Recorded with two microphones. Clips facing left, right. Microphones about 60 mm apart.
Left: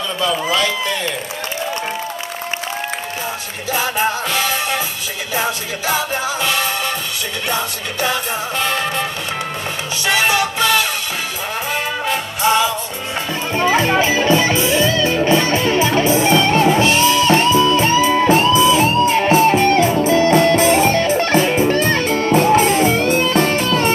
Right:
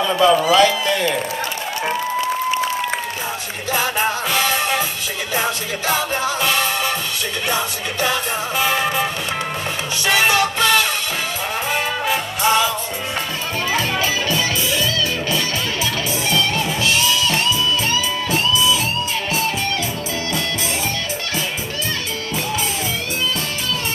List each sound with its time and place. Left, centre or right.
3.7 s music: centre
10.0 s music: centre
13.6 s music: left